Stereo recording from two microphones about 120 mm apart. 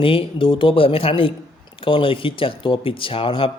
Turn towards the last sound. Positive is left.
turn(degrees=50)  # may be behind; listen again after turning